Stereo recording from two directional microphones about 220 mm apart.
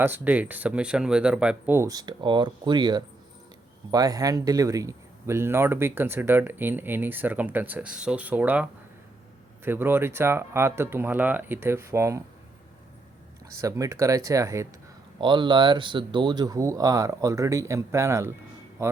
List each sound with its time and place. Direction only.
0.0 s speech: 10° right (ahead or behind)
9.6 s speech: 10° right (ahead or behind)
13.6 s speech: 15° right (ahead or behind)
18.8 s a sound: 10° right (ahead or behind)